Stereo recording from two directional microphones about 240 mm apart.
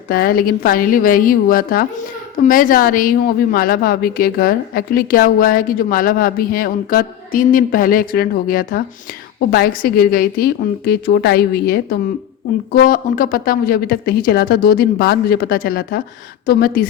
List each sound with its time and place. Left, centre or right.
0.1 s a woman's voice: left